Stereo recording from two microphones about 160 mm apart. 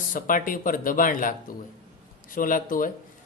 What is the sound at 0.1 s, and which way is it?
Speech, 60° left (ahead or behind).